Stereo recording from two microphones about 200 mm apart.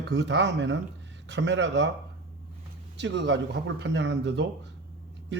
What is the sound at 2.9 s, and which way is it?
Speech, 60° right (ahead or behind).